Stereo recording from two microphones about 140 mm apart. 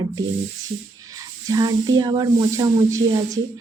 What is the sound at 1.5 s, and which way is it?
Speech, 25° right (ahead or behind).